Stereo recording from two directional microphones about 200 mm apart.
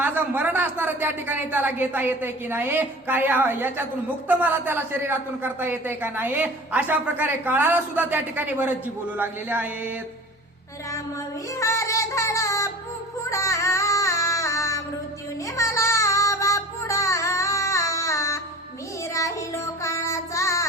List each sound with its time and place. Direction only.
0.0 s a man's voice: 10° right (ahead or behind)
11.5 s music: 15° left (ahead or behind)
15.4 s child singing: 15° left (ahead or behind)